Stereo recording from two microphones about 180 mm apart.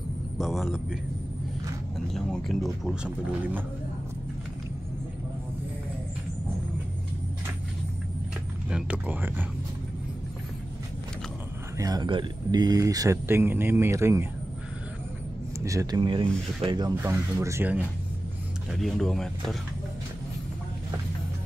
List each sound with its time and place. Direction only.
0.4 s speech: centre (ahead or behind)
2.1 s speech: centre (ahead or behind)
8.6 s speech: 5° right (ahead or behind)
11.8 s speech: 20° right (ahead or behind)
15.6 s speech: 15° right (ahead or behind)
18.8 s speech: centre (ahead or behind)